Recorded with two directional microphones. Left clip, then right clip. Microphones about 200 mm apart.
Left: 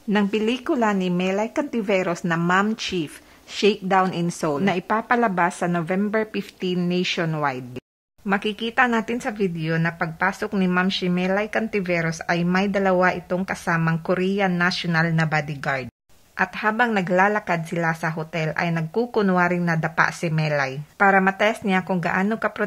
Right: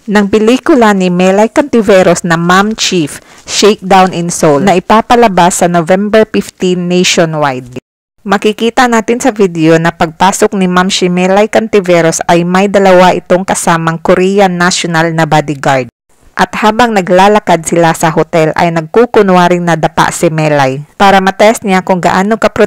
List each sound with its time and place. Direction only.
0.1 s speech: 40° right (ahead or behind)
7.2 s speech: 30° right (ahead or behind)
8.3 s speech: 45° right (ahead or behind)